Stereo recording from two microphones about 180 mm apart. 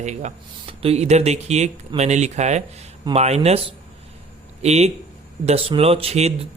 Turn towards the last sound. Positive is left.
turn(degrees=-35)  # may be behind; listen again after turning